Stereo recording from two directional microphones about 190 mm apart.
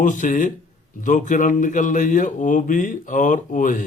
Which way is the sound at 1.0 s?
40° left (ahead or behind).